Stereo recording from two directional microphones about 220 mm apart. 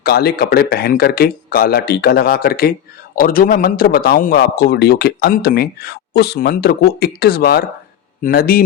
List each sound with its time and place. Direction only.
0.0 s speech: 45° left (ahead or behind)